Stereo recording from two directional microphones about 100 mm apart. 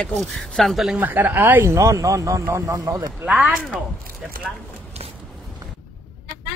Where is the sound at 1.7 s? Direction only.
35° right (ahead or behind).